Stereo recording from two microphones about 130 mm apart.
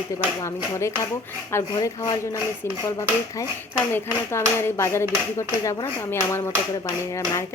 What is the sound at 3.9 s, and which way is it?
Speech, 20° left (ahead or behind).